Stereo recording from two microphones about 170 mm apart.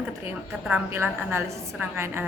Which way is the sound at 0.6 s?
10° right (ahead or behind).